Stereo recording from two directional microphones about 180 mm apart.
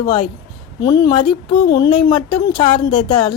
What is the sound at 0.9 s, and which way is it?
A woman's voice, 20° left (ahead or behind).